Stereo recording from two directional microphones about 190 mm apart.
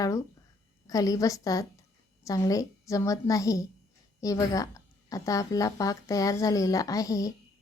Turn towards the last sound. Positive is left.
turn(degrees=15)  # may be behind; listen again after turning